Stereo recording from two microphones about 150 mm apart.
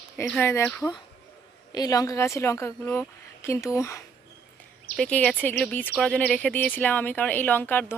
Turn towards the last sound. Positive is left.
turn(degrees=15)  # may be behind; listen again after turning